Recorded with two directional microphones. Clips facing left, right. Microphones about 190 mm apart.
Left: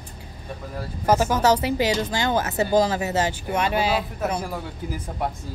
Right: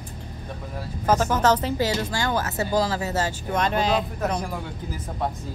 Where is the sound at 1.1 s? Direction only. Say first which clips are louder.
Left 1 dB; 10° left (ahead or behind).